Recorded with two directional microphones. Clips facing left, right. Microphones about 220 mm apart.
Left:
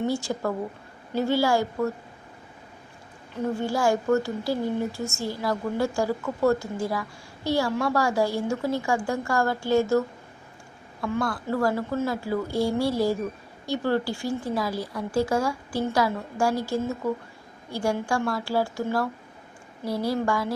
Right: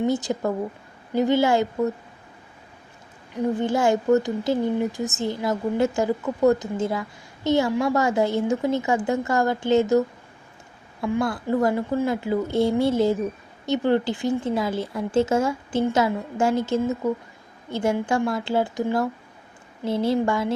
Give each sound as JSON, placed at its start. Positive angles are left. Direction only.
{"t": 0.0, "sound": "speech", "side_deg": -20}
{"t": 3.3, "sound": "speech", "side_deg": -20}
{"t": 11.0, "sound": "speech", "side_deg": -20}